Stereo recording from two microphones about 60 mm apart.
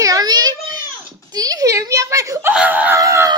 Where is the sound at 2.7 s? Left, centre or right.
Right.